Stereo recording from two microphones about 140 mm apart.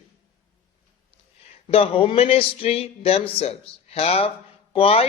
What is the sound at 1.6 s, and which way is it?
Speech, 40° left (ahead or behind).